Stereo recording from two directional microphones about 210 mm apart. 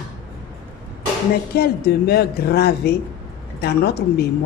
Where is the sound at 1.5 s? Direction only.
50° left (ahead or behind).